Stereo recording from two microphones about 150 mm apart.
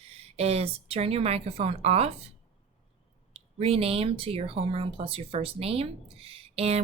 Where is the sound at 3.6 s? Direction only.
40° right (ahead or behind).